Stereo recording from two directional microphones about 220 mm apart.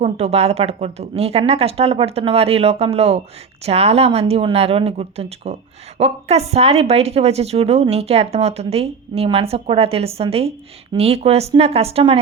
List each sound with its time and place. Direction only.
0.0 s a woman's voice: 30° right (ahead or behind)